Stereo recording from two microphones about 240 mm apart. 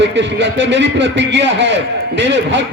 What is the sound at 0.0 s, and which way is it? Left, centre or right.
A man's voice, right.